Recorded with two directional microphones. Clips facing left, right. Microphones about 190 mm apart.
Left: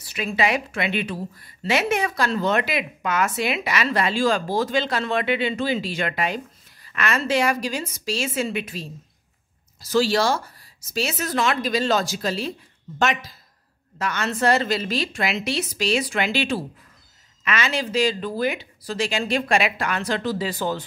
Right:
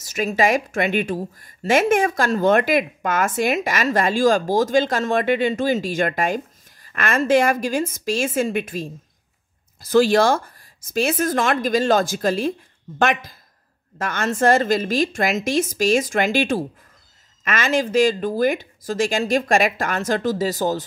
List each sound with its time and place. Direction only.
0.0 s speech: 45° right (ahead or behind)